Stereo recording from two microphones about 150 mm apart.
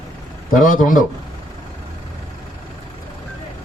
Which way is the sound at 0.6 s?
60° left (ahead or behind).